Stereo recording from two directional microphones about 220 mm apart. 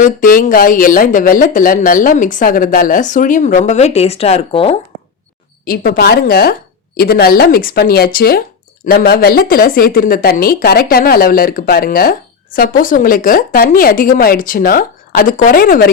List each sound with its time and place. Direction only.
0.0 s speech: 40° left (ahead or behind)
5.6 s a woman's voice: 45° left (ahead or behind)